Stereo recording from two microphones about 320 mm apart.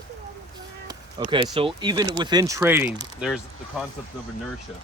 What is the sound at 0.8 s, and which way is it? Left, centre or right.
Basketball bounce, centre.